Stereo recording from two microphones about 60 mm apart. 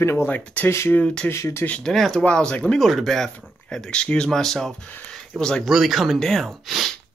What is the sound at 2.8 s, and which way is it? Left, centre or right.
Speech, centre.